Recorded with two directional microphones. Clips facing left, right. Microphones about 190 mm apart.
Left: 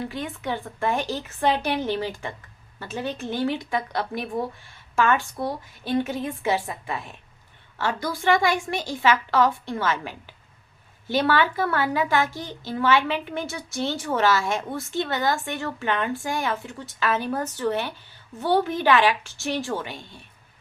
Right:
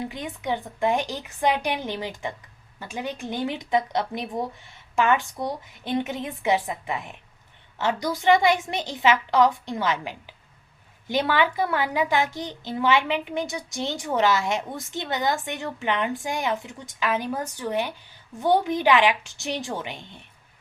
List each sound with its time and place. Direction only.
0.0 s a child's voice: 20° right (ahead or behind)